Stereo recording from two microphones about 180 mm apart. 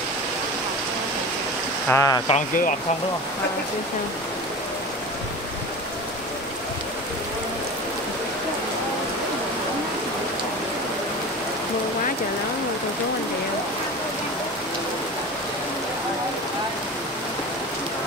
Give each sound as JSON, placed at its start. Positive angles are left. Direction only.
{"t": 1.9, "sound": "speech", "side_deg": 15}
{"t": 2.2, "sound": "speech", "side_deg": 45}